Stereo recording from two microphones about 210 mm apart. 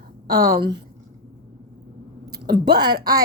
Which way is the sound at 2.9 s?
20° right (ahead or behind).